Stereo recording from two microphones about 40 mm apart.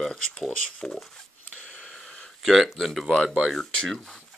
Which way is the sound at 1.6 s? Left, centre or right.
Left.